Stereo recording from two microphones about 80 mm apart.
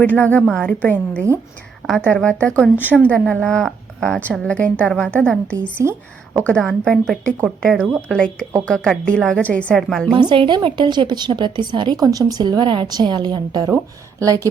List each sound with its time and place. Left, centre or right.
0.0 s a woman's voice: centre
9.7 s a woman's voice: centre
10.2 s a woman's voice: right
11.9 s a woman's voice: right
13.7 s speech: right